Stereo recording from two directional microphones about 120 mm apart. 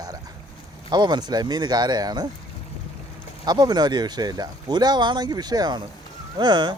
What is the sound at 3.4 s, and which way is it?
Speech, 35° right (ahead or behind).